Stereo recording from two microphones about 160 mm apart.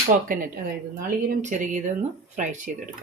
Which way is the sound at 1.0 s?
55° right (ahead or behind).